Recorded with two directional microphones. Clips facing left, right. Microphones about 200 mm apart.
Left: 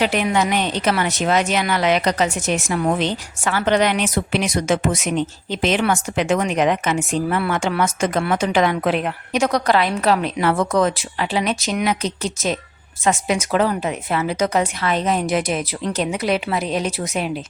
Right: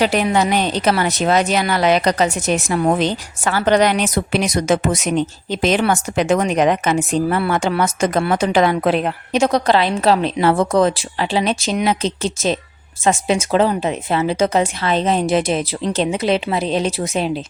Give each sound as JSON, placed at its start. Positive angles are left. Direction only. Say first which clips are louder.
{"t": 0.0, "sound": "a woman's voice", "louder": "right 3 dB", "side_deg": -35}